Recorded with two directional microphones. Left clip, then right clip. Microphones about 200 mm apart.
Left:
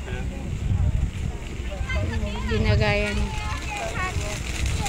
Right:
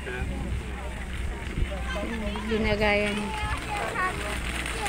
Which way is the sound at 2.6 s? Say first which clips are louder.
Even; centre (ahead or behind).